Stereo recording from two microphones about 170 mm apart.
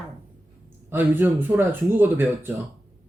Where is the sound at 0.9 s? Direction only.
10° right (ahead or behind).